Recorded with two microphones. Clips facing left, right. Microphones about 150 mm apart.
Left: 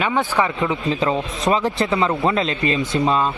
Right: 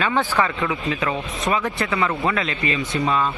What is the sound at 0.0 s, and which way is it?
Speech, 20° left (ahead or behind).